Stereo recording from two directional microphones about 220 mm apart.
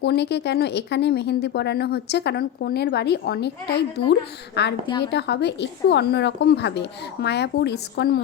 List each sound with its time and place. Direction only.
0.0 s speech: 50° left (ahead or behind)
4.9 s a woman's voice: 20° left (ahead or behind)
5.1 s speech: 50° left (ahead or behind)